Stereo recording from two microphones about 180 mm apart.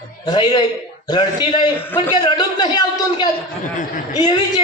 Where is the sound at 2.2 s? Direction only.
25° left (ahead or behind).